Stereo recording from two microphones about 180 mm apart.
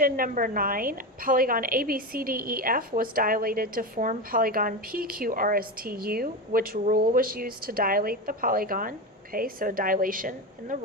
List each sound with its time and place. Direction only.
0.0 s a woman's voice: 50° right (ahead or behind)